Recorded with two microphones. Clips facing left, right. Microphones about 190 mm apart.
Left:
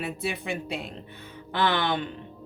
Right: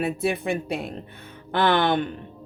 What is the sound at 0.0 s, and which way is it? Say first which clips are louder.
Speech: right 7 dB; 50° right (ahead or behind).